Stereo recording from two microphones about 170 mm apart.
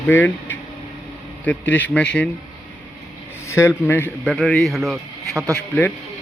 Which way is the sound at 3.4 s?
15° left (ahead or behind).